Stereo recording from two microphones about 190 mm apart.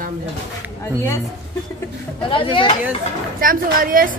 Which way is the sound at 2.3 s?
25° left (ahead or behind).